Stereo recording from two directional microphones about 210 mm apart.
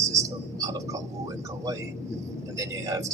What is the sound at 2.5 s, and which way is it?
Speech, 15° right (ahead or behind).